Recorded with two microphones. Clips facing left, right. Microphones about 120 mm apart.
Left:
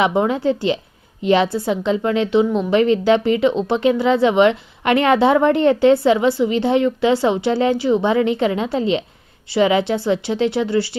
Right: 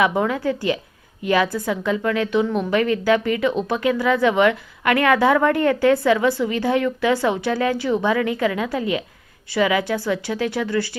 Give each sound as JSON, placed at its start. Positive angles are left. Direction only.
{"t": 0.0, "sound": "a woman's voice", "side_deg": 25}